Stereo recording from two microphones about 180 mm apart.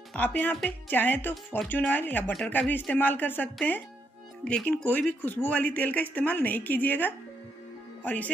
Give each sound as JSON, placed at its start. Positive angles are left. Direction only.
{"t": 0.1, "sound": "speech", "side_deg": 10}